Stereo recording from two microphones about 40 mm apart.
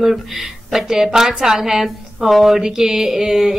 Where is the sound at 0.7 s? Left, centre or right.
Centre.